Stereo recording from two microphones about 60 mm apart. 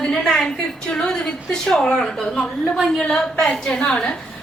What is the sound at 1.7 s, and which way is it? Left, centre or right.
A woman's voice, centre.